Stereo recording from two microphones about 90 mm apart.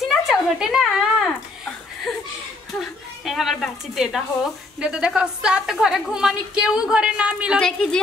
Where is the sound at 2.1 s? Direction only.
Centre (ahead or behind).